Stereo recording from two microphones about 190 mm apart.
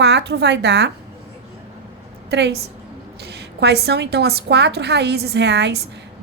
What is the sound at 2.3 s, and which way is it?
A woman's voice, 65° right (ahead or behind).